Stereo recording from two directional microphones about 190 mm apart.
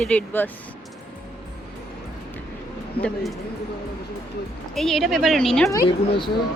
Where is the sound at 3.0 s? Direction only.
5° left (ahead or behind).